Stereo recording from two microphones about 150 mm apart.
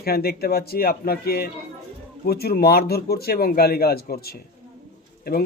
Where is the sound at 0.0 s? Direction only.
90° left.